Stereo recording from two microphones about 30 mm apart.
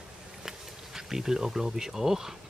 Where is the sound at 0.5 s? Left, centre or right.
Centre.